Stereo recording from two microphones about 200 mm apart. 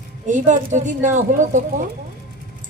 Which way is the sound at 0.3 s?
40° right (ahead or behind).